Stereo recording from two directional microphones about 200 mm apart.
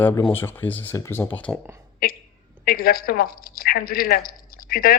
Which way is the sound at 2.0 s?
50° left (ahead or behind).